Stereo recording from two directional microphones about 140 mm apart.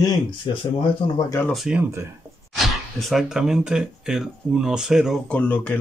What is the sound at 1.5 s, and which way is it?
Speech, 5° right (ahead or behind).